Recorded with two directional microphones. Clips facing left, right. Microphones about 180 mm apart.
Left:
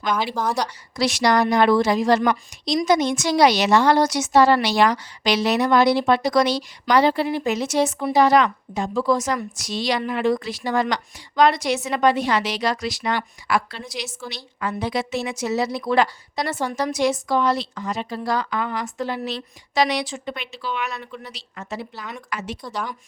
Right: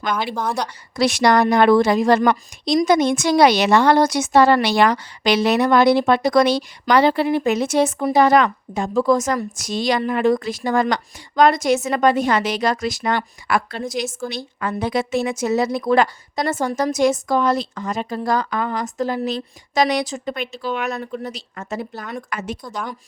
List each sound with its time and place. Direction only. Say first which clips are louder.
0.3 s a woman's voice: even; centre (ahead or behind)
0.9 s a woman's voice: right 3 dB; 55° right (ahead or behind)